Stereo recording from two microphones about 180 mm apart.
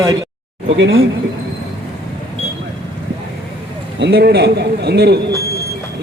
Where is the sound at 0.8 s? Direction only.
90° right.